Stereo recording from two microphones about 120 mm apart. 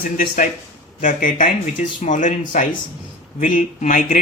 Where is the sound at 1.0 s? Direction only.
90° left.